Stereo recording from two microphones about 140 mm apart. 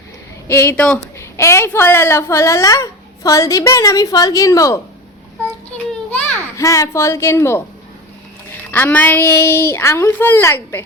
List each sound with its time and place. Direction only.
0.4 s a woman's voice: 20° left (ahead or behind)
6.1 s a sound: 10° left (ahead or behind)
6.6 s a woman's voice: 20° left (ahead or behind)
8.7 s a woman's voice: 15° left (ahead or behind)